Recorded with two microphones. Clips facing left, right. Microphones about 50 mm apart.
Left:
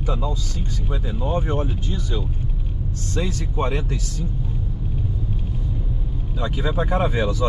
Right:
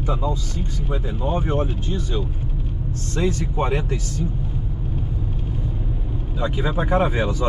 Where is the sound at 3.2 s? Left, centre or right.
Centre.